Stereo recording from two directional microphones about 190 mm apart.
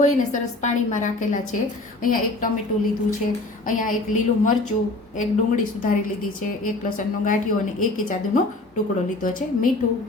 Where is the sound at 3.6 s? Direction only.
45° left (ahead or behind).